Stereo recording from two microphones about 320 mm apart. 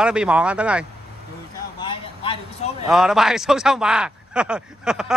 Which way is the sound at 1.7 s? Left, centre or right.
Centre.